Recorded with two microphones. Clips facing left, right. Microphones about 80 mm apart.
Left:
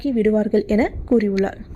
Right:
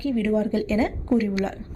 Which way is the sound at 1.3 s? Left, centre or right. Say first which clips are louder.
Left 6 dB; left.